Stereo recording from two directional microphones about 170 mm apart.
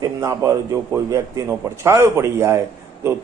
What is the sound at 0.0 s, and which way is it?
A man's voice, 20° right (ahead or behind).